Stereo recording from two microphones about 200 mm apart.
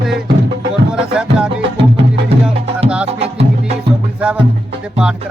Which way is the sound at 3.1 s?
30° right (ahead or behind).